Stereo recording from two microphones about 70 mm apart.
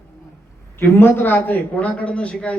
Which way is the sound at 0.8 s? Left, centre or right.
Left.